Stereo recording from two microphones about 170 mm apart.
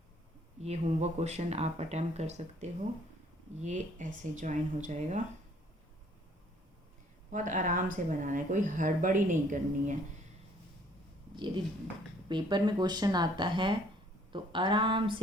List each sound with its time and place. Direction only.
0.6 s speech: 40° right (ahead or behind)
7.3 s speech: 50° right (ahead or behind)
11.3 s speech: 25° right (ahead or behind)